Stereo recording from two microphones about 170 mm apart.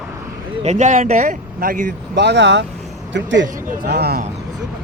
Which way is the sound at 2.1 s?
85° right.